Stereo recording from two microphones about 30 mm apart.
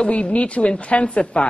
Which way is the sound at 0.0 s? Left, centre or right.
Left.